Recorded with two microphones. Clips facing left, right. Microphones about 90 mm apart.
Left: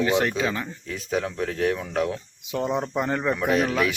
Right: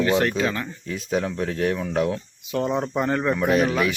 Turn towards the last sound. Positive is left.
turn(degrees=-5)  # may be behind; listen again after turning